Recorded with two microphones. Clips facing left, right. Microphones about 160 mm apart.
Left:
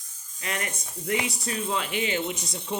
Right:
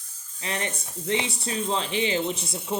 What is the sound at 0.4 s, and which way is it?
Speech, 30° right (ahead or behind).